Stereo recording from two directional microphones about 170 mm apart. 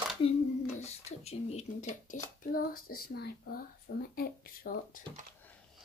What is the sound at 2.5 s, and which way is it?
A child's voice, 65° left (ahead or behind).